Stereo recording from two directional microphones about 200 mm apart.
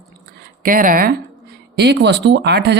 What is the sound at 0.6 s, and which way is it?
Speech, 45° right (ahead or behind).